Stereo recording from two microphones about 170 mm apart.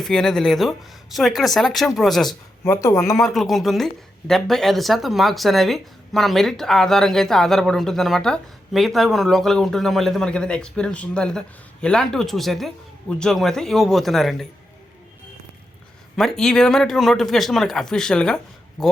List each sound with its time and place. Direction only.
0.0 s speech: 5° left (ahead or behind)
2.6 s speech: 20° left (ahead or behind)
3.3 s speech: centre (ahead or behind)
16.1 s speech: centre (ahead or behind)